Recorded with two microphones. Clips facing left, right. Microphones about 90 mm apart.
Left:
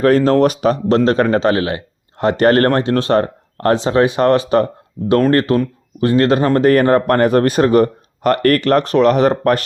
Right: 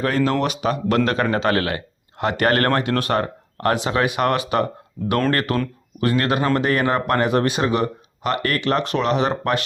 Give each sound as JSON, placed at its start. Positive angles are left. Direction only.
{"t": 0.2, "sound": "speech", "side_deg": 40}
{"t": 2.1, "sound": "speech", "side_deg": 35}